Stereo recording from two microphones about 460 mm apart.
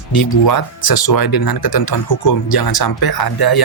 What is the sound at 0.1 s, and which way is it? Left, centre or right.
Speech, left.